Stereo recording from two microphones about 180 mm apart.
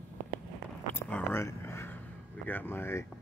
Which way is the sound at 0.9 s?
10° left (ahead or behind).